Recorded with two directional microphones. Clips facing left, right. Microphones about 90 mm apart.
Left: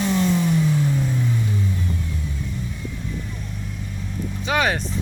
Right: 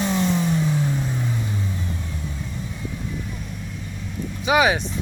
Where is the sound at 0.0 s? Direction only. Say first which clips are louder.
Left 1 dB; 25° right (ahead or behind).